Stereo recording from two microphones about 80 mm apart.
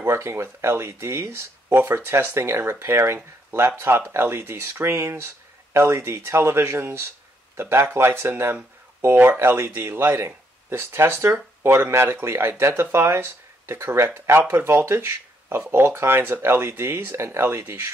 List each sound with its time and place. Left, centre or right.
0.0 s speech: right